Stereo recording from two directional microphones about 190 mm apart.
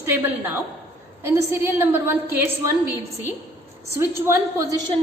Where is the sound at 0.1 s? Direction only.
10° right (ahead or behind).